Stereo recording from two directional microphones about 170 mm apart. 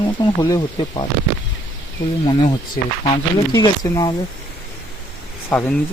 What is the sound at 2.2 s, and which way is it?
Speech, 30° left (ahead or behind).